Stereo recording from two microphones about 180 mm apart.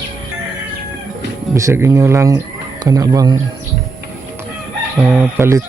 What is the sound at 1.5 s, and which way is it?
Speech, 15° right (ahead or behind).